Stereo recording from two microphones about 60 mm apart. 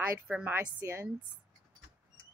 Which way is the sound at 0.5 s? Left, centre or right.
Right.